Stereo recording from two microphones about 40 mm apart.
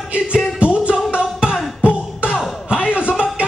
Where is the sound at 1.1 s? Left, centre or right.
Right.